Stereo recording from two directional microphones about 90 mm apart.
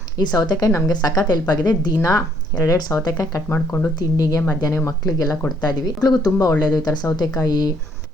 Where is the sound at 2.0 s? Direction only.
40° left (ahead or behind).